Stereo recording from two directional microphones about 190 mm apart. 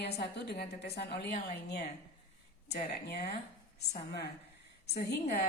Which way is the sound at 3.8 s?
60° left (ahead or behind).